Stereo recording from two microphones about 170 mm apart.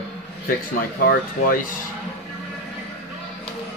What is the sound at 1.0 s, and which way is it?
Speech, 55° left (ahead or behind).